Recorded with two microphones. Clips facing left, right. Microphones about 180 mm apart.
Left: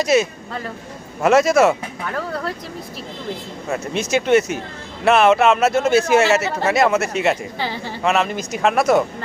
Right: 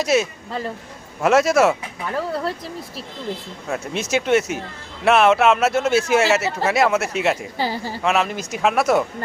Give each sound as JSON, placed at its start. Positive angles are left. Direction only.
{"t": 0.0, "sound": "speech", "side_deg": 0}
{"t": 3.7, "sound": "speech", "side_deg": 0}
{"t": 7.6, "sound": "speech", "side_deg": -40}
{"t": 8.0, "sound": "speech", "side_deg": 0}